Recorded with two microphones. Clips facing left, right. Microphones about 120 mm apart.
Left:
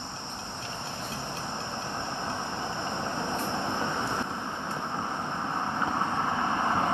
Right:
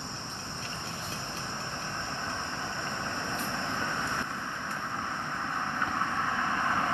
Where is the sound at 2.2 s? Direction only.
25° left (ahead or behind).